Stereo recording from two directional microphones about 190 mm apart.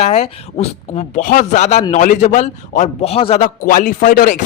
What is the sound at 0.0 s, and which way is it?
A man's voice, 35° left (ahead or behind).